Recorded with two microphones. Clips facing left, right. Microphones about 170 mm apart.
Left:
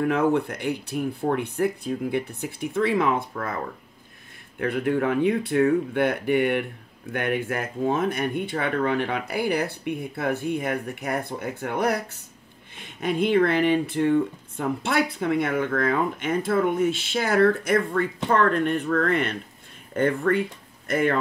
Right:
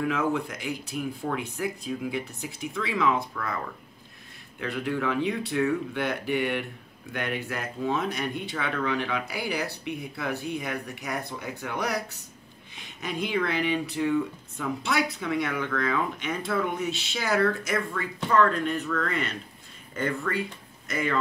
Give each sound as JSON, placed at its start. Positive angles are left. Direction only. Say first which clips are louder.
{"t": 0.0, "sound": "speech", "louder": "left 5 dB", "side_deg": 55}